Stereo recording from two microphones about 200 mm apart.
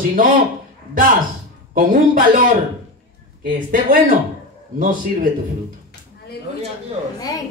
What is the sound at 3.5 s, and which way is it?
Speech, 40° right (ahead or behind).